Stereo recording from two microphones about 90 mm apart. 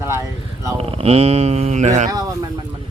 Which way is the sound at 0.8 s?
90° right.